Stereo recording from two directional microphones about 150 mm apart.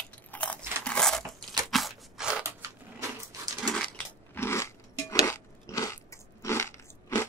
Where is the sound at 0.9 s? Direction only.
5° left (ahead or behind).